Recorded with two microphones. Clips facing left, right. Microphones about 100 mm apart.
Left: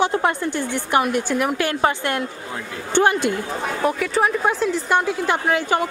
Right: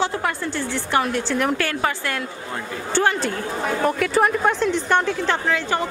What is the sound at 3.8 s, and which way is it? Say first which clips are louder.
A woman's voice: right 1 dB; centre (ahead or behind).